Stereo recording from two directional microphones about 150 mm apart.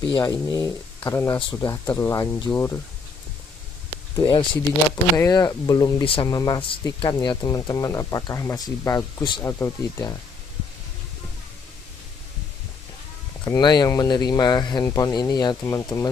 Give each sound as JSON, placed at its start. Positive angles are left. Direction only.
{"t": 0.2, "sound": "speech", "side_deg": 25}
{"t": 4.2, "sound": "speech", "side_deg": 30}
{"t": 13.4, "sound": "speech", "side_deg": 25}